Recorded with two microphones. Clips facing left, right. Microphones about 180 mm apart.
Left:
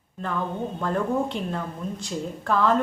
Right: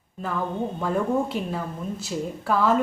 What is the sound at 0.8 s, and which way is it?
A woman's voice, 5° right (ahead or behind).